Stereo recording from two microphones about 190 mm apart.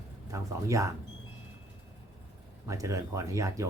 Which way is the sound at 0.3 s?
15° right (ahead or behind).